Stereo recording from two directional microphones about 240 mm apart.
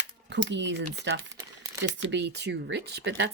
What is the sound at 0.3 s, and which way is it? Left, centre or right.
Speech, right.